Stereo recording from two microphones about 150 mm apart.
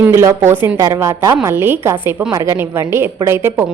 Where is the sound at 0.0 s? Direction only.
20° right (ahead or behind).